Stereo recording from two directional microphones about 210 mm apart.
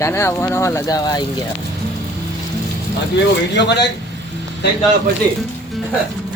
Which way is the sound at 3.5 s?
55° left (ahead or behind).